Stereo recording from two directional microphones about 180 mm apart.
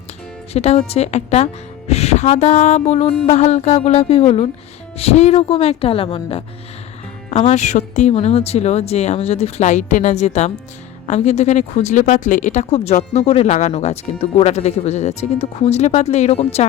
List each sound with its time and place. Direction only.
0.5 s speech: 35° left (ahead or behind)